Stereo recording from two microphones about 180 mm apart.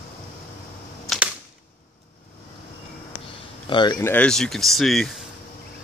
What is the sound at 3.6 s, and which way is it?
Speech, 25° left (ahead or behind).